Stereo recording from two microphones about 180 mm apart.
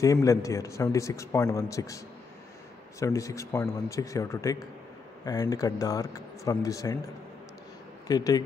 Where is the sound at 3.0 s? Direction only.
15° left (ahead or behind).